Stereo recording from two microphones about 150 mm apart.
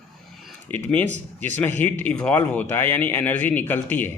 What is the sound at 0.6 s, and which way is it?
Speech, 10° left (ahead or behind).